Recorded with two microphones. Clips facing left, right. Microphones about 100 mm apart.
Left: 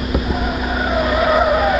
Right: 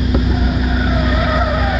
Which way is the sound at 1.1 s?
10° left (ahead or behind).